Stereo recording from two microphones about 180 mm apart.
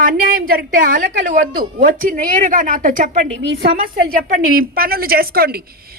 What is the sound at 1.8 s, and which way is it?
A woman's voice, 45° right (ahead or behind).